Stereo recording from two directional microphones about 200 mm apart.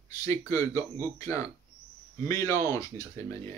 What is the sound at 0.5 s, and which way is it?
Speech, 15° left (ahead or behind).